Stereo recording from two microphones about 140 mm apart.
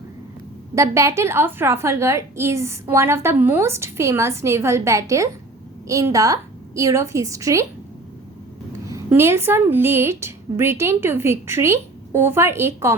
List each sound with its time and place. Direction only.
0.8 s a woman's voice: 20° right (ahead or behind)
9.0 s a woman's voice: 20° right (ahead or behind)